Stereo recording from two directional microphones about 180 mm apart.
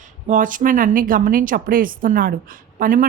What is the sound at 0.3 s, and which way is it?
A woman's voice, 50° right (ahead or behind).